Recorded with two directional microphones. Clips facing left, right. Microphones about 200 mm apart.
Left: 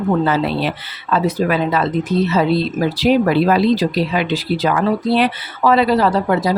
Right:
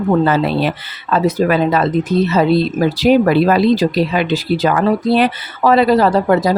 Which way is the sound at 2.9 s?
45° right (ahead or behind).